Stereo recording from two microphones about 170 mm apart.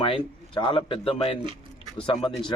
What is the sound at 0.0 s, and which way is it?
Speech, 30° left (ahead or behind).